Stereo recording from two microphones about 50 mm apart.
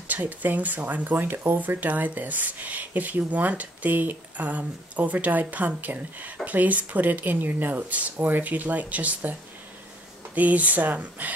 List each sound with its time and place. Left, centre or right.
0.1 s speech: right
1.7 s speech: right